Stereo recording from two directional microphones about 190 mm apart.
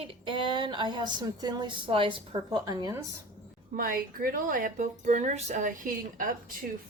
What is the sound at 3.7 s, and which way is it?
Speech, 45° right (ahead or behind).